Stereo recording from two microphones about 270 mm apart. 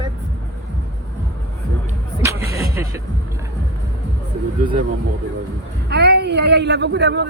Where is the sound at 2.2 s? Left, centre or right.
Centre.